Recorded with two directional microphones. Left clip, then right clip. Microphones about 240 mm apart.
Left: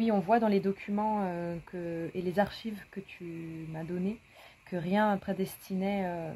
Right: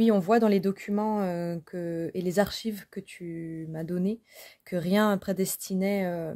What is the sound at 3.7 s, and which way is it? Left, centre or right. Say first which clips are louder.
Speech: right 4 dB; right.